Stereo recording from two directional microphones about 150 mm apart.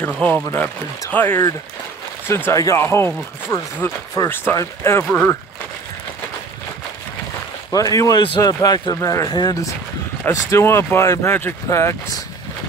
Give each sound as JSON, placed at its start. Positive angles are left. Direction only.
{"t": 0.0, "sound": "speech", "side_deg": 10}
{"t": 7.7, "sound": "speech", "side_deg": 25}